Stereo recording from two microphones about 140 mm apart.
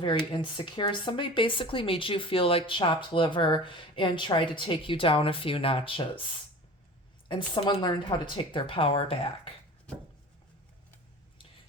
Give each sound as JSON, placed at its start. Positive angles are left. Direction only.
{"t": 0.3, "sound": "speech", "side_deg": 35}